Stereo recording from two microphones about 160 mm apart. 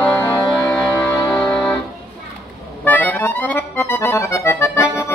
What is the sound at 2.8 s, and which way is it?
Accordion, 10° left (ahead or behind).